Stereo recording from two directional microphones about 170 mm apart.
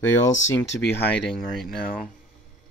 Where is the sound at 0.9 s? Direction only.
5° left (ahead or behind).